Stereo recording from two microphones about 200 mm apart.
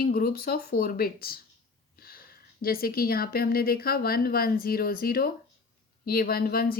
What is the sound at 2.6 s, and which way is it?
Speech, 50° left (ahead or behind).